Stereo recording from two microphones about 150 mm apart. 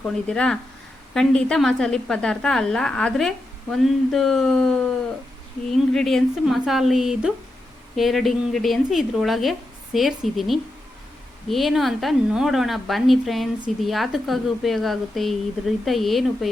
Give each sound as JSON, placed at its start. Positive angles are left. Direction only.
{"t": 0.0, "sound": "a woman's voice", "side_deg": 5}